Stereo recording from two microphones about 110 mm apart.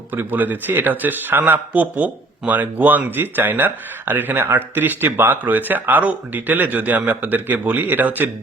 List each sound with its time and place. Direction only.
0.1 s a man's voice: 15° right (ahead or behind)